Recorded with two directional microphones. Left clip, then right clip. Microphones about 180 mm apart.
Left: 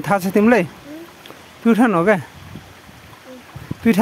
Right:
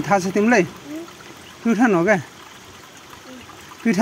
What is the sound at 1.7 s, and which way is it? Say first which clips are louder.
Speech: left 2 dB; 30° left (ahead or behind).